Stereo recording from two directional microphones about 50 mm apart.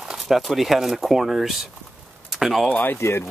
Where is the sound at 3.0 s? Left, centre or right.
Left.